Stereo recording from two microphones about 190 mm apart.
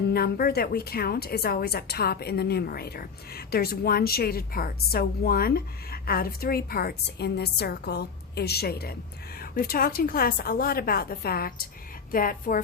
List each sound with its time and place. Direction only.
0.1 s a woman's voice: 55° left (ahead or behind)